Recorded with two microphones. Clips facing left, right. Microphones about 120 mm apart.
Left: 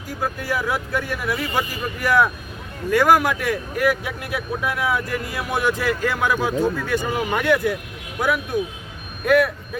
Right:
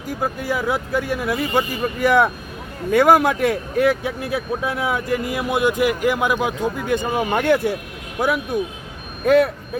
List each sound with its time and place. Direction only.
0.2 s speech: 20° right (ahead or behind)
9.2 s speech: 25° right (ahead or behind)